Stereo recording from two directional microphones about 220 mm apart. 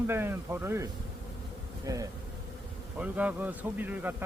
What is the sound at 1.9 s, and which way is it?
A man's voice, 15° right (ahead or behind).